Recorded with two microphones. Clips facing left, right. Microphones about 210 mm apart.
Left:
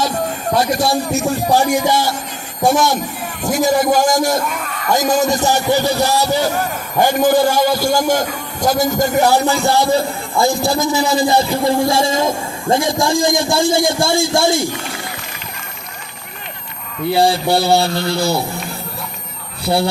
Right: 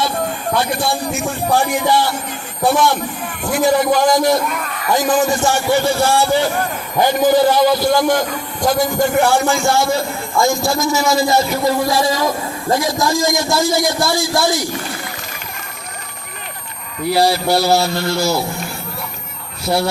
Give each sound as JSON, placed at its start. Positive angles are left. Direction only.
{"t": 0.5, "sound": "a man's voice", "side_deg": 40}
{"t": 4.4, "sound": "a sound", "side_deg": 0}
{"t": 4.9, "sound": "a man's voice", "side_deg": 40}
{"t": 17.1, "sound": "speech", "side_deg": 30}
{"t": 17.8, "sound": "speech", "side_deg": 0}